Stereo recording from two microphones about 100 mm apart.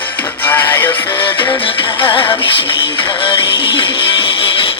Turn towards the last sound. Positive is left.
turn(degrees=60)  # may be behind; listen again after turning